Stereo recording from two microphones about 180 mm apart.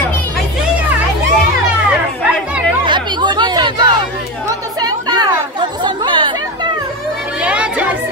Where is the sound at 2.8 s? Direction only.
25° right (ahead or behind).